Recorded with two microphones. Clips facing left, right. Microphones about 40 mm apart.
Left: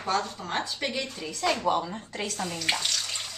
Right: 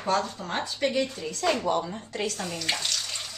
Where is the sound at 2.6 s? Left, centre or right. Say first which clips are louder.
Left 1 dB; centre.